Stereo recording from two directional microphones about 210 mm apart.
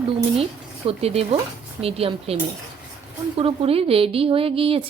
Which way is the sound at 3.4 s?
25° right (ahead or behind).